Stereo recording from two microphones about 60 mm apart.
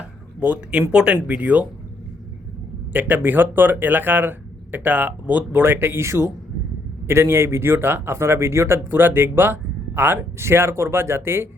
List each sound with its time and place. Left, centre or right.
0.3 s speech: right
2.9 s speech: right